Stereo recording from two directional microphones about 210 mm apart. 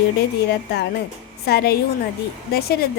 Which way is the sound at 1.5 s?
50° left (ahead or behind).